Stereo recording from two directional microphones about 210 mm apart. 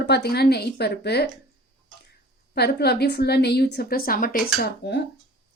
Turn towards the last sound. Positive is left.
turn(degrees=50)  # may be behind; listen again after turning